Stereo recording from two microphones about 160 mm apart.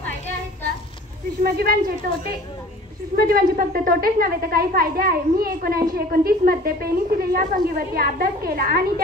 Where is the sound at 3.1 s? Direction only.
70° right (ahead or behind).